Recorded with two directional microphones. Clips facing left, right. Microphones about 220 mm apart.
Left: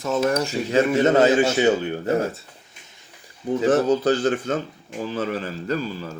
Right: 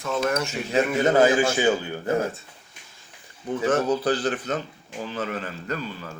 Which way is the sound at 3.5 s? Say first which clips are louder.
Left 4 dB; 30° left (ahead or behind).